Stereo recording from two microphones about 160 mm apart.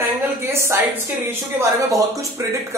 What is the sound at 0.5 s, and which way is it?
A woman's voice, 15° right (ahead or behind).